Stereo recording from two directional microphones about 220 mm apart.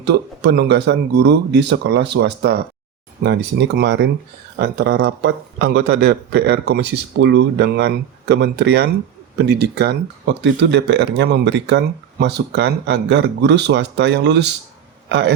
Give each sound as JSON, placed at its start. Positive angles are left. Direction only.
{"t": 0.0, "sound": "speech", "side_deg": -50}